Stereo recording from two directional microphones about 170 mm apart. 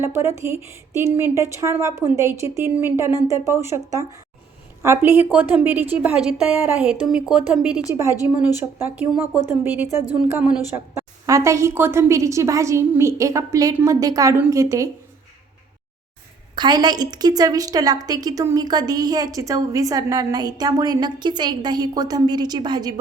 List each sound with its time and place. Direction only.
0.0 s a woman's voice: 15° right (ahead or behind)
16.6 s a woman's voice: 25° right (ahead or behind)